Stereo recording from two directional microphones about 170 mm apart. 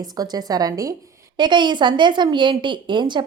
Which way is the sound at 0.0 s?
25° right (ahead or behind).